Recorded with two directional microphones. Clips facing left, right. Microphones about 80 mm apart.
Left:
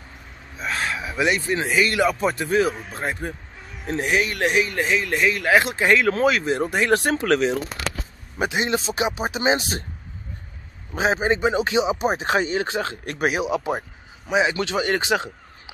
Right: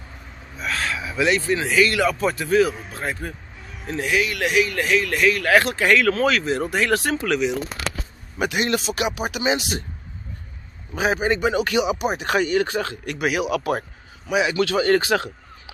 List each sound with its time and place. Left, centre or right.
0.6 s a sound: left
1.5 s speech: left
8.4 s speech: left
11.0 s a man's voice: left